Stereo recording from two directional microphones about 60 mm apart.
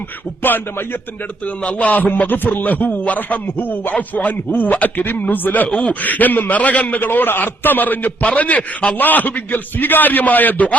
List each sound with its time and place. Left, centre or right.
0.4 s a man's voice: left